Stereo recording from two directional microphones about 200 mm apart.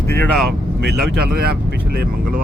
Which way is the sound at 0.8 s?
55° right (ahead or behind).